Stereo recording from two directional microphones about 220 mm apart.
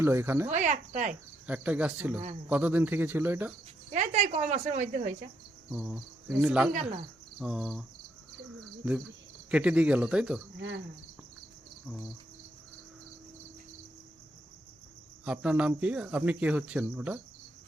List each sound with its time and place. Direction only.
0.0 s speech: 10° right (ahead or behind)
0.5 s speech: 30° right (ahead or behind)
1.5 s speech: 5° right (ahead or behind)
3.9 s speech: 30° right (ahead or behind)
5.7 s cricket: 5° right (ahead or behind)
8.8 s speech: 5° right (ahead or behind)
9.5 s cricket: 5° right (ahead or behind)
15.2 s cricket: 5° right (ahead or behind)